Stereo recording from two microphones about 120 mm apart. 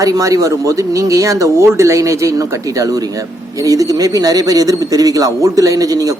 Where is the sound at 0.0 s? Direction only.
30° right (ahead or behind).